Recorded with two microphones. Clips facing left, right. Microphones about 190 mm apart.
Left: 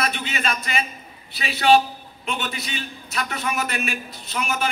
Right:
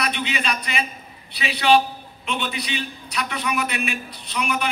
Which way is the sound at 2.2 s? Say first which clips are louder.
Right 1 dB; 40° left (ahead or behind).